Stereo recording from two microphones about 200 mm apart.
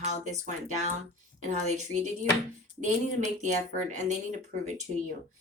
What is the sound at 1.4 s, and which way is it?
Speech, 35° right (ahead or behind).